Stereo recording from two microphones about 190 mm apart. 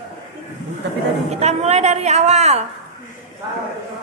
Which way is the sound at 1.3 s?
35° right (ahead or behind).